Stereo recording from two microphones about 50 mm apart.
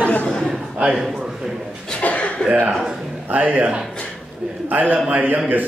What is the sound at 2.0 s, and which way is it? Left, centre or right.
Chuckle, left.